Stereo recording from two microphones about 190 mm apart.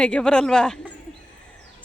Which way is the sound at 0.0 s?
5° left (ahead or behind).